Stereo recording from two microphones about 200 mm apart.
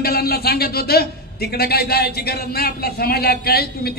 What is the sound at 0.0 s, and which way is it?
A man's voice, 50° left (ahead or behind).